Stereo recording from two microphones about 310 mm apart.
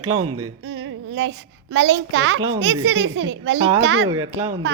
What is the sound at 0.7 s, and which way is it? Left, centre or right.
A child's voice, right.